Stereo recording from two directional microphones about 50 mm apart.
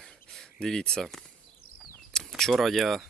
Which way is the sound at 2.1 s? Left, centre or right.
Centre.